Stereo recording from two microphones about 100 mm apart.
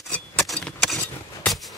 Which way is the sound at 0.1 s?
5° left (ahead or behind).